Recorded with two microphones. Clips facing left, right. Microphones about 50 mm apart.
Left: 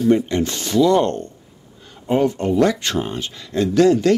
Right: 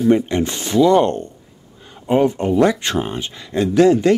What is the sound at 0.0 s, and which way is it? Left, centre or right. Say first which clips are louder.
Speech: right 1 dB; right.